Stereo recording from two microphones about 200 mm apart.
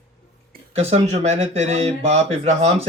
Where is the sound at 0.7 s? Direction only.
30° right (ahead or behind).